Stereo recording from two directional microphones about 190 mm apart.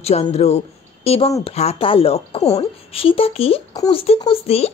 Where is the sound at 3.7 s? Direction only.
20° left (ahead or behind).